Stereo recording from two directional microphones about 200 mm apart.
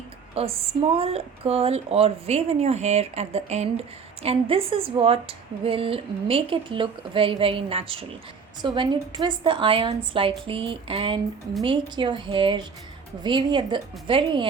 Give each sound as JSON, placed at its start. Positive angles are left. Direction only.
{"t": 0.3, "sound": "a woman's voice", "side_deg": -30}